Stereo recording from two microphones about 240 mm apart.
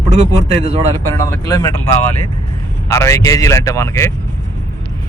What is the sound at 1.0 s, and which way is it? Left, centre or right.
Speech, centre.